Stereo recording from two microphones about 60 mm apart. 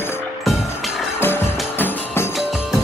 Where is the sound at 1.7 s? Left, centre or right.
Left.